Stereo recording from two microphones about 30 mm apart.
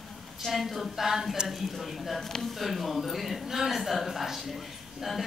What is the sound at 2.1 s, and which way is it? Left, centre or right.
Speech, centre.